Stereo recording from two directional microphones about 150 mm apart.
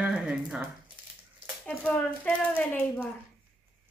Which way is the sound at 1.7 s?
10° left (ahead or behind).